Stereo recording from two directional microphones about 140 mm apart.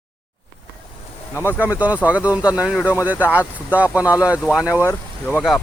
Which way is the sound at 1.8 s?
10° right (ahead or behind).